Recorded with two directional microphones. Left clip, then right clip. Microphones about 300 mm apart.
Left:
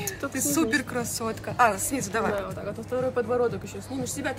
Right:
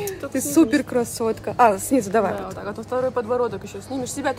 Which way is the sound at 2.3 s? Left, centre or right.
Centre.